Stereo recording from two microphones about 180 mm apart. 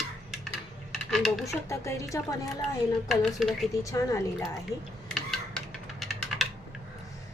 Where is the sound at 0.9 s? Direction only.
Centre (ahead or behind).